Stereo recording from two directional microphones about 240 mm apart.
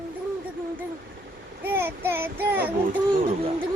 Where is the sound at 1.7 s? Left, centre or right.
Centre.